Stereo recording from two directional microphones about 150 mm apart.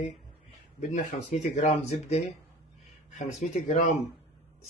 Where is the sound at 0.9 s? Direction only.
50° left (ahead or behind).